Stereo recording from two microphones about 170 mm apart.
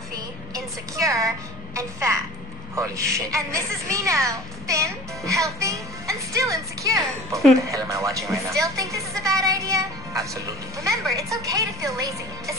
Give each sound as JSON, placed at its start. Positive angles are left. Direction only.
{"t": 0.9, "sound": "a woman's voice", "side_deg": -20}